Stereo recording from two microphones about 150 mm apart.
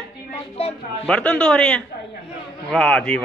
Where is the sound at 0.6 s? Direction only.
40° left (ahead or behind).